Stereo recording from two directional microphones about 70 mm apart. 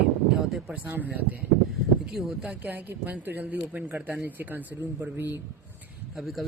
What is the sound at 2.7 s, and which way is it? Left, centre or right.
Speech, right.